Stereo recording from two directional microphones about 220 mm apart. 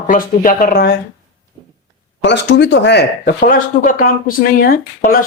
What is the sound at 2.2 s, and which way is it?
Speech, 50° left (ahead or behind).